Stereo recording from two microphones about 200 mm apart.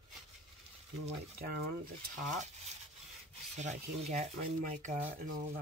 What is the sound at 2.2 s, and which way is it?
Speech, 35° right (ahead or behind).